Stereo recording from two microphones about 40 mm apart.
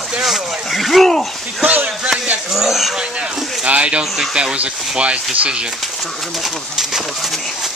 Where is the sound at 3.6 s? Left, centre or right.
Right.